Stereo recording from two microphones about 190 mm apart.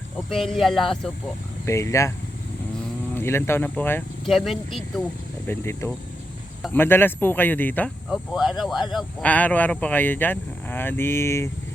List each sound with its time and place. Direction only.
0.3 s speech: centre (ahead or behind)
1.6 s speech: 15° left (ahead or behind)
3.2 s speech: 15° left (ahead or behind)
4.3 s speech: centre (ahead or behind)
5.5 s speech: 15° left (ahead or behind)